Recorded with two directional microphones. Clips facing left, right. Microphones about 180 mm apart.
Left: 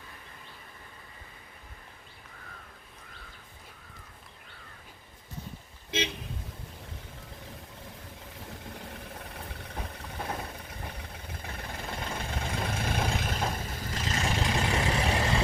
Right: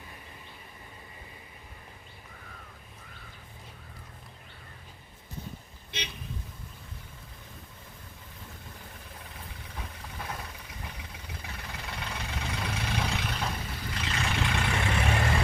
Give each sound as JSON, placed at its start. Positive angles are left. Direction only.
{"t": 5.9, "sound": "speech", "side_deg": 90}
{"t": 9.1, "sound": "vehicle", "side_deg": 60}